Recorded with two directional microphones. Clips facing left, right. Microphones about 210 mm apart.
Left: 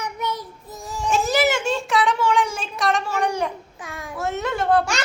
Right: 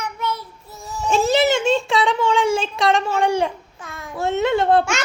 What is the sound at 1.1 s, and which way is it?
A woman's voice, 25° right (ahead or behind).